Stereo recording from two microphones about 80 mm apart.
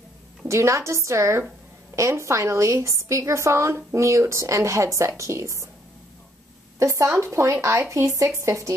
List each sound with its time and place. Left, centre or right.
0.5 s a woman's voice: right
6.8 s a woman's voice: right